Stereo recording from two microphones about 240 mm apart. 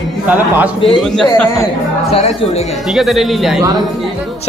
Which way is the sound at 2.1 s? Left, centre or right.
Left.